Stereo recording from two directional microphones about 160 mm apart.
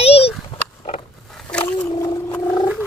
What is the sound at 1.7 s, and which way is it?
Boat, 25° left (ahead or behind).